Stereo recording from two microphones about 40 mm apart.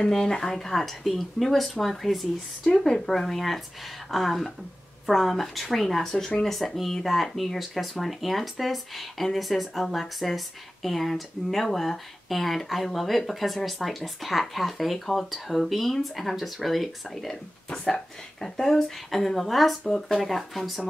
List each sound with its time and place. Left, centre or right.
0.0 s speech: centre
2.6 s speech: centre